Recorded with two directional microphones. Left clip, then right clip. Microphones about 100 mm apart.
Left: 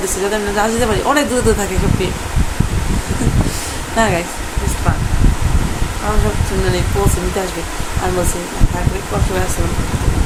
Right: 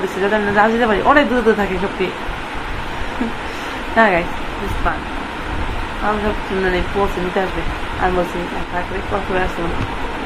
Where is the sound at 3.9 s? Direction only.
35° left (ahead or behind).